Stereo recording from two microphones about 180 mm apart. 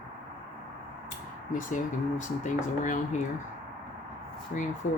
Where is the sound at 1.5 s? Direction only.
45° left (ahead or behind).